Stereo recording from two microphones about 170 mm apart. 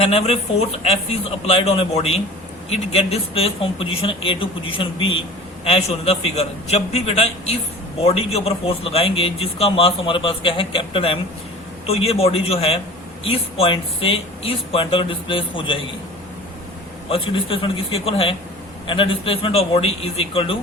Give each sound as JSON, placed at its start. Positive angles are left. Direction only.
{"t": 0.0, "sound": "a man's voice", "side_deg": 35}
{"t": 17.1, "sound": "a man's voice", "side_deg": 30}